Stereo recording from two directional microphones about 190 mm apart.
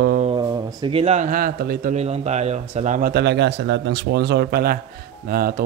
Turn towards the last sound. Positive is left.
turn(degrees=-50)  # may be behind; listen again after turning